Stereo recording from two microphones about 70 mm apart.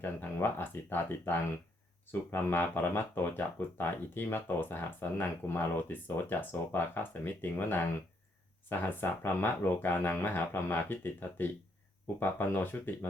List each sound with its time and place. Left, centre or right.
0.0 s speech: left